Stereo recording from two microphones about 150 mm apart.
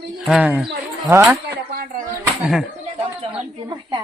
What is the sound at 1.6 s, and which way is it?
Speech, 90° right.